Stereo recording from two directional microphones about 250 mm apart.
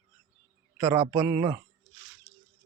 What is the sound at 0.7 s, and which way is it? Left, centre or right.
Speech, centre.